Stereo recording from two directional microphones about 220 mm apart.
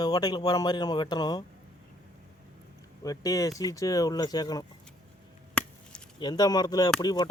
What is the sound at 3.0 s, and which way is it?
Speech, 15° left (ahead or behind).